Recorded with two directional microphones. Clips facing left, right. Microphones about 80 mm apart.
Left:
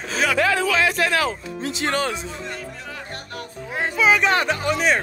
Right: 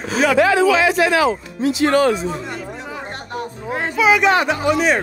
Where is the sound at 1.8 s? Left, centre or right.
Right.